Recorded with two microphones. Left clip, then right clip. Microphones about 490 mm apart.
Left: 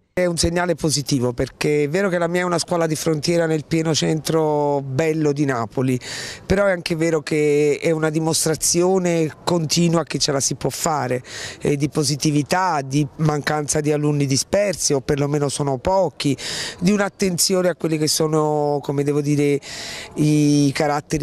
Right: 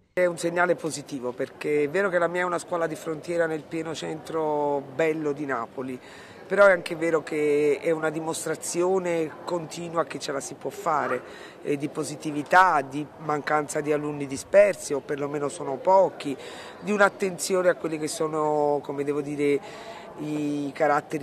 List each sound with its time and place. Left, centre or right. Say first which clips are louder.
0.1 s speech: left 4 dB; left